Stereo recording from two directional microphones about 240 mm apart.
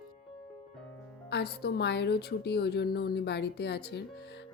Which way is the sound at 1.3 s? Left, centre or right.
Left.